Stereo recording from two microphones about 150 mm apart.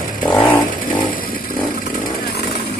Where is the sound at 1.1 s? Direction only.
70° left (ahead or behind).